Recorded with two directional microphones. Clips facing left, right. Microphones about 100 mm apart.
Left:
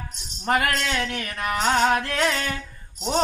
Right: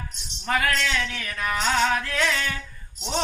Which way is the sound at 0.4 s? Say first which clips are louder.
Left 2 dB; 45° left (ahead or behind).